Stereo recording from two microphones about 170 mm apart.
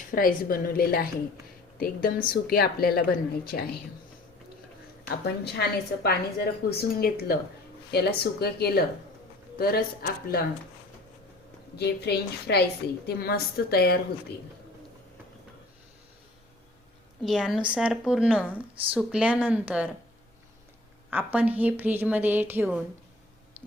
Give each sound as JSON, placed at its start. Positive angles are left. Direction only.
{"t": 0.1, "sound": "a woman's voice", "side_deg": 55}
{"t": 5.0, "sound": "a woman's voice", "side_deg": 75}
{"t": 11.8, "sound": "a woman's voice", "side_deg": 75}
{"t": 17.2, "sound": "a woman's voice", "side_deg": 0}
{"t": 21.1, "sound": "a woman's voice", "side_deg": -10}